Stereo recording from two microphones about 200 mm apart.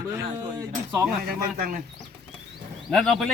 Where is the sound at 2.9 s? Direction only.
Centre (ahead or behind).